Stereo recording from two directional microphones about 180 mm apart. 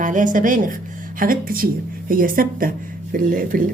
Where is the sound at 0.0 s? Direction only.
45° right (ahead or behind).